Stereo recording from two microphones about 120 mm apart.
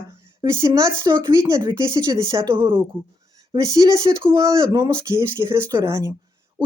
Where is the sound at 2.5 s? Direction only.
45° right (ahead or behind).